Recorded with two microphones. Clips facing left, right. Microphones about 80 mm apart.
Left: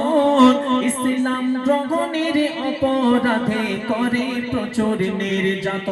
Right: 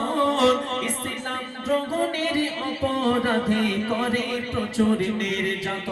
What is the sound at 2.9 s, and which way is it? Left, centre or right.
Speech, left.